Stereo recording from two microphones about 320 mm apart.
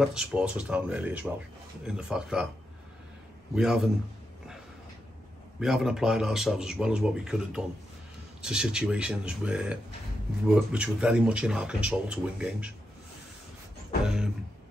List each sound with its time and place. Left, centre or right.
0.0 s speech: centre
3.5 s speech: centre
5.6 s speech: centre
14.0 s speech: centre